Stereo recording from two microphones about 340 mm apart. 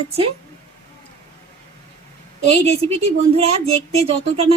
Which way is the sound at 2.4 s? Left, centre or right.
Centre.